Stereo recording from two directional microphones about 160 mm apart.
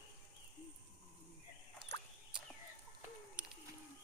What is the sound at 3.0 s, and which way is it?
Bird, 5° right (ahead or behind).